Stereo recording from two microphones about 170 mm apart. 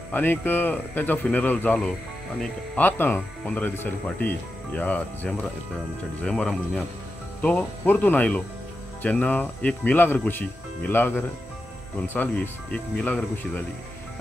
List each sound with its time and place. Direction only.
0.1 s speech: 10° left (ahead or behind)